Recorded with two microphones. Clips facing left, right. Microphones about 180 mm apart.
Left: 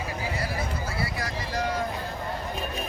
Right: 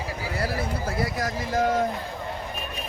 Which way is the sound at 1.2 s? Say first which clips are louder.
Right 5 dB; 45° right (ahead or behind).